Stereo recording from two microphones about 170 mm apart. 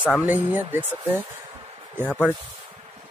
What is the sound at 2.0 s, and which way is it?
Speech, 10° left (ahead or behind).